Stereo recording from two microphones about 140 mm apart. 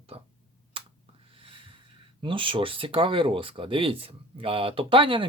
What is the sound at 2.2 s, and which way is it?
Speech, 35° right (ahead or behind).